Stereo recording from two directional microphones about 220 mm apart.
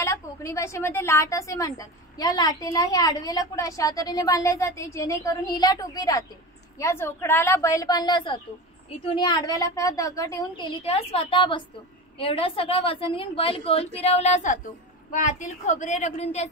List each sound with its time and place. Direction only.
0.0 s a woman's voice: 15° left (ahead or behind)
10.8 s a woman's voice: 25° left (ahead or behind)